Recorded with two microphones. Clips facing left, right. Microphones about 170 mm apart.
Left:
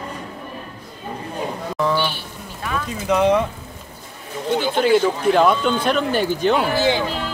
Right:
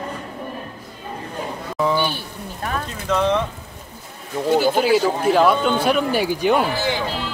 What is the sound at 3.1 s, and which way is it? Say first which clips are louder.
Speech: left 3 dB; 10° left (ahead or behind).